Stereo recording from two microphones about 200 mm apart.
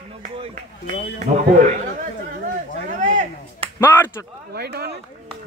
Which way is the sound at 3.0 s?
35° right (ahead or behind).